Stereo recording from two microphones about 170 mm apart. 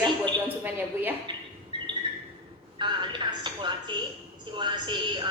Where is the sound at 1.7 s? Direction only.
30° right (ahead or behind).